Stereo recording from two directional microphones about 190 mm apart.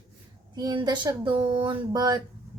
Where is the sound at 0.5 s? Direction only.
20° right (ahead or behind).